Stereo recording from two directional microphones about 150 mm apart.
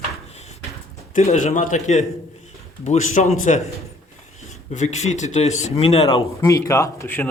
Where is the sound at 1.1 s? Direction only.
55° left (ahead or behind).